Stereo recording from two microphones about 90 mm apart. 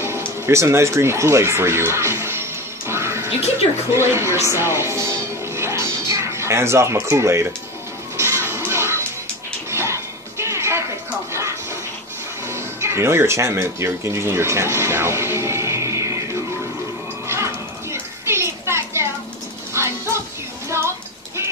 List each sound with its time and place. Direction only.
0.0 s speech: 30° right (ahead or behind)
2.9 s music: 30° right (ahead or behind)
3.9 s speech: 30° right (ahead or behind)
5.6 s music: 30° right (ahead or behind)
6.0 s speech: 35° right (ahead or behind)
8.5 s music: 30° right (ahead or behind)
12.4 s speech: 30° right (ahead or behind)
17.3 s a sound: 30° right (ahead or behind)
19.7 s dog: 30° right (ahead or behind)